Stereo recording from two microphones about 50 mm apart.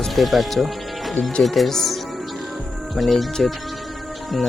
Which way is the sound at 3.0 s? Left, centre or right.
Centre.